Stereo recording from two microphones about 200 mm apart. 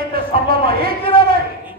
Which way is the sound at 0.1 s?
50° right (ahead or behind).